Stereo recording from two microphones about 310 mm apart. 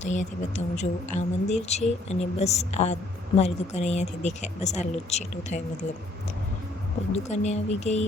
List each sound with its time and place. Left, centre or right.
0.0 s speech: left
7.1 s speech: left